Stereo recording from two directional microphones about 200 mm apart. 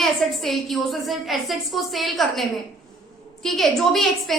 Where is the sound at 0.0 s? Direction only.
Centre (ahead or behind).